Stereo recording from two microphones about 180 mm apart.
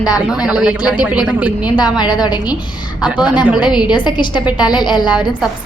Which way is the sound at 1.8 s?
25° left (ahead or behind).